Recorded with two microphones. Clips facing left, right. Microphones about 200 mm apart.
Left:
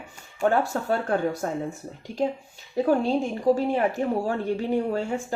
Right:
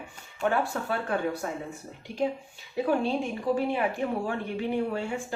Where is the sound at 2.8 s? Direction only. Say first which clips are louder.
Left 4 dB; 40° left (ahead or behind).